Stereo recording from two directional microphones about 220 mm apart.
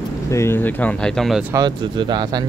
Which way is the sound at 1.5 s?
20° right (ahead or behind).